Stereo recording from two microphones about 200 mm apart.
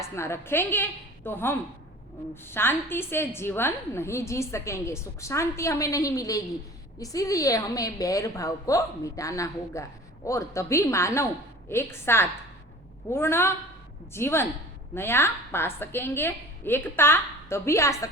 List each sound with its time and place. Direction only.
0.2 s a woman's voice: 10° left (ahead or behind)